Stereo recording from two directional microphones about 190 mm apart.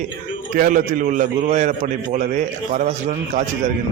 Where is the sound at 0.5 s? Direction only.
45° right (ahead or behind).